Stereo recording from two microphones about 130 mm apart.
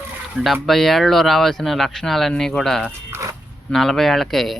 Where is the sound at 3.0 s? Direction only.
20° right (ahead or behind).